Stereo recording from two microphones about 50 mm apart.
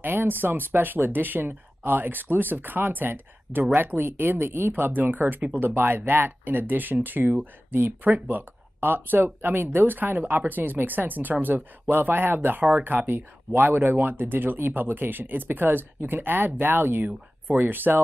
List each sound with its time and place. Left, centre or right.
0.0 s speech: right